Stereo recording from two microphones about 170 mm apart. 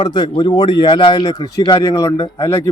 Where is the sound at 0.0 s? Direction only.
25° left (ahead or behind).